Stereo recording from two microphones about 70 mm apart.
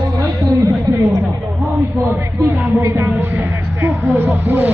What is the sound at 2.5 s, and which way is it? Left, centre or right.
Speech, right.